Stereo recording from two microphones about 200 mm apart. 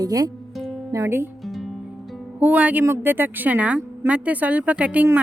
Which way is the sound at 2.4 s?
5° right (ahead or behind).